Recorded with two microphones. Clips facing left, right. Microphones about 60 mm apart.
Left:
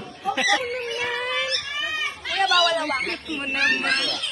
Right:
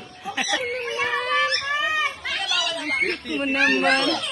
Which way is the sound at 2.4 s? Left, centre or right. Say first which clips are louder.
Left 9 dB; left.